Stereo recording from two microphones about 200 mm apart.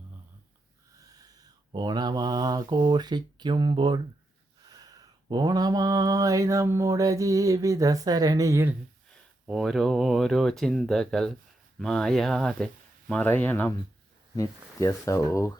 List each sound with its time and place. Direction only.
0.9 s speech: 20° right (ahead or behind)
4.7 s mantra: 20° right (ahead or behind)
9.5 s speech: centre (ahead or behind)